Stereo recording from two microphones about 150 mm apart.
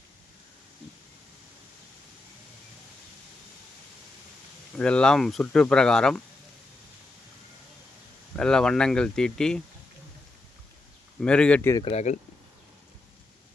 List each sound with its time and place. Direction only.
4.8 s speech: 5° left (ahead or behind)
8.4 s speech: 5° left (ahead or behind)
11.2 s speech: 5° left (ahead or behind)
11.8 s speech: 45° left (ahead or behind)